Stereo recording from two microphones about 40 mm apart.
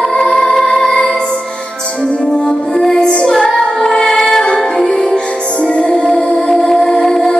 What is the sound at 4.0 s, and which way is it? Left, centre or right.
Music, centre.